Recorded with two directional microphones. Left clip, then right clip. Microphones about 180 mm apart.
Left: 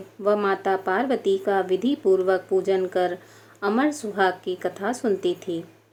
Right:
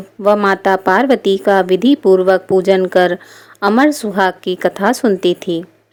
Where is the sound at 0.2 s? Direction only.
40° right (ahead or behind).